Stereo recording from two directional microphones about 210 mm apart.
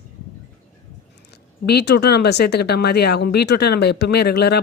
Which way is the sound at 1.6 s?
50° left (ahead or behind).